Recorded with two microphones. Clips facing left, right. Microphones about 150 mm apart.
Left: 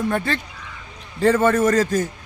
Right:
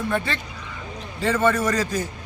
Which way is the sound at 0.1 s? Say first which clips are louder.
Left 2 dB; 40° left (ahead or behind).